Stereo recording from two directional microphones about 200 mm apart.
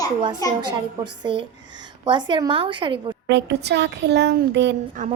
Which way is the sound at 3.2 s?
60° right (ahead or behind).